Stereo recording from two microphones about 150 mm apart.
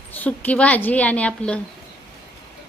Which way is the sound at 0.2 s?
10° left (ahead or behind).